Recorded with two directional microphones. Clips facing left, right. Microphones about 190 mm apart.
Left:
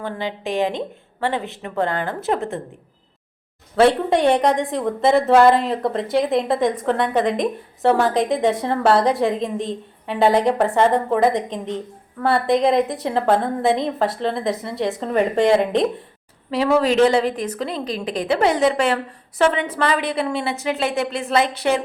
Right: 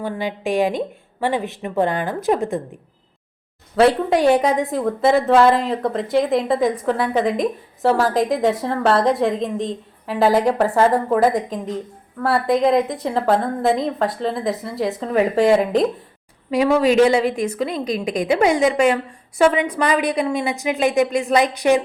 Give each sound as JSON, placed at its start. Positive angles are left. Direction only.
{"t": 0.0, "sound": "a woman's voice", "side_deg": -15}
{"t": 3.8, "sound": "a woman's voice", "side_deg": 0}
{"t": 17.0, "sound": "a woman's voice", "side_deg": -10}